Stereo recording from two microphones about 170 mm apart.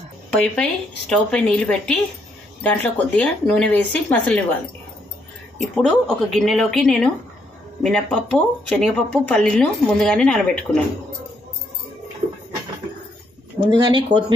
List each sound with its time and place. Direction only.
0.3 s speech: 5° left (ahead or behind)
5.6 s speech: centre (ahead or behind)
13.8 s speech: 25° right (ahead or behind)